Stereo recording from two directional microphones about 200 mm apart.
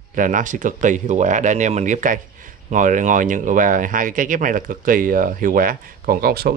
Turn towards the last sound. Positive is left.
turn(degrees=-50)  # may be behind; listen again after turning